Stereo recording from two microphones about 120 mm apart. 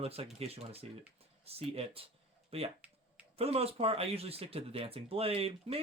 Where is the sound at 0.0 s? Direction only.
55° right (ahead or behind).